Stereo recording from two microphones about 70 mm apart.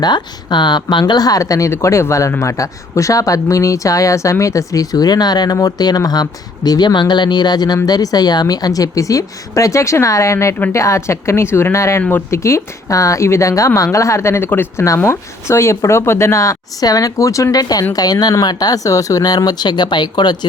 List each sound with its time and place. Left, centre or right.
0.0 s speech: left
5.5 s a woman's voice: left
16.8 s speech: left